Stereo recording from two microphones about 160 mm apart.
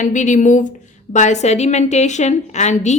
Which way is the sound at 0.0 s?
50° left (ahead or behind).